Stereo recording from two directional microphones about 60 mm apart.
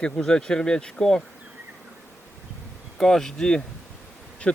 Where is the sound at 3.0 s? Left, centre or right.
Centre.